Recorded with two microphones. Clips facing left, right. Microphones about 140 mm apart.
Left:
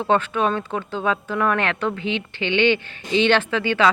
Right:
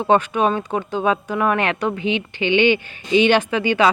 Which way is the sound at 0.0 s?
15° right (ahead or behind).